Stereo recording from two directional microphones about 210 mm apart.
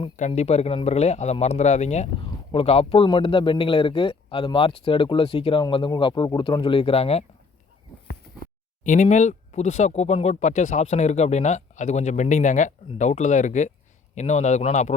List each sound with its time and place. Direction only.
0.0 s a man's voice: 30° left (ahead or behind)
8.8 s speech: 35° left (ahead or behind)